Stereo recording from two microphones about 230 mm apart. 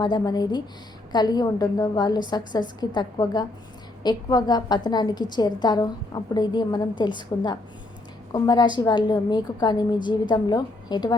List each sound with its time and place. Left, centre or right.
0.0 s a woman's voice: centre